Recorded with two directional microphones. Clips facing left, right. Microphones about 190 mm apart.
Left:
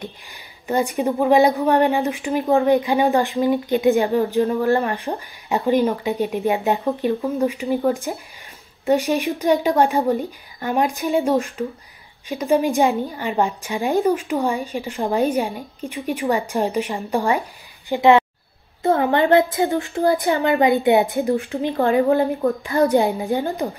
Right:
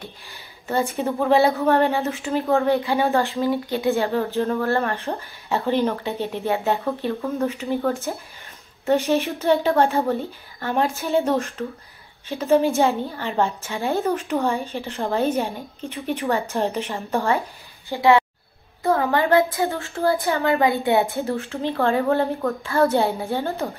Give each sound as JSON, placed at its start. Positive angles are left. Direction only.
{"t": 0.0, "sound": "speech", "side_deg": 15}